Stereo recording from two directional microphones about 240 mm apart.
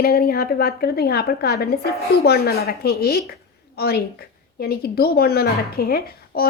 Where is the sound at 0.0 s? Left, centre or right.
Left.